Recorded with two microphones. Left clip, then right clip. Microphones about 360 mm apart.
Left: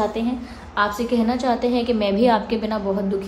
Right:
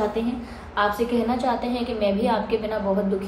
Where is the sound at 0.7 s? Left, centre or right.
Left.